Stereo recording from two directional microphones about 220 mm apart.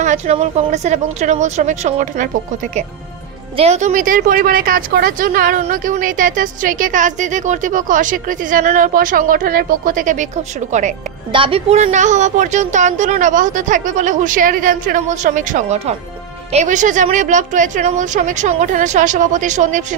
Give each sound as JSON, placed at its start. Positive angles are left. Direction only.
{"t": 0.0, "sound": "speech", "side_deg": -30}
{"t": 3.5, "sound": "speech", "side_deg": -30}